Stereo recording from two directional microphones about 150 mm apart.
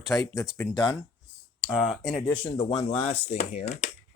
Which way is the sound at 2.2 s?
35° left (ahead or behind).